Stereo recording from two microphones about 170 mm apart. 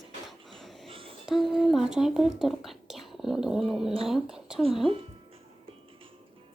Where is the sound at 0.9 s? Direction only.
30° right (ahead or behind).